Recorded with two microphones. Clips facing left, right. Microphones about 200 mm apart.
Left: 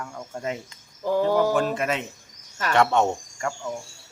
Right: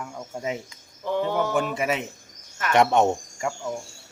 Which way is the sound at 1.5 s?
10° right (ahead or behind).